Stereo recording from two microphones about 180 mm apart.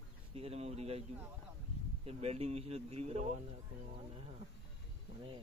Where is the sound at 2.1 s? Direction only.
35° right (ahead or behind).